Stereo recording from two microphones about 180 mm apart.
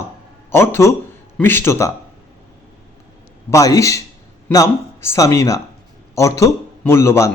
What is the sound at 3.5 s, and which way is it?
A man's voice, 20° left (ahead or behind).